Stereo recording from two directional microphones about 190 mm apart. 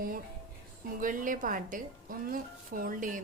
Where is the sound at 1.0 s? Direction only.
45° right (ahead or behind).